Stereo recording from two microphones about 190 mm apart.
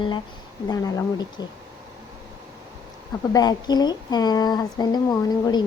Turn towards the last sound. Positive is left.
turn(degrees=20)  # may be behind; listen again after turning